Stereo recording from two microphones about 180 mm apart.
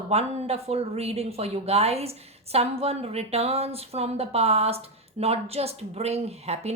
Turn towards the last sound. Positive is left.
turn(degrees=-35)  # may be behind; listen again after turning